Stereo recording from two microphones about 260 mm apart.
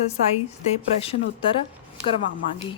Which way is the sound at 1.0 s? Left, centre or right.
Left.